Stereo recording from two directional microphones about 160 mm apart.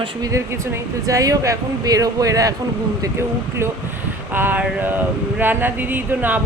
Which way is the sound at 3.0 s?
15° right (ahead or behind).